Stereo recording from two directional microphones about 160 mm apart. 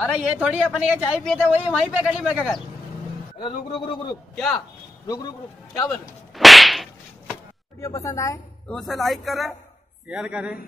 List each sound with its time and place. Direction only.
0.0 s speech: 5° right (ahead or behind)
3.3 s a man's voice: 30° left (ahead or behind)
5.9 s whip: centre (ahead or behind)
7.8 s a man's voice: 20° left (ahead or behind)
8.6 s speech: centre (ahead or behind)